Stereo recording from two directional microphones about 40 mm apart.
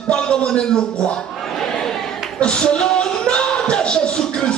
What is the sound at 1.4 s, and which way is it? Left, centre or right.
Chatter, centre.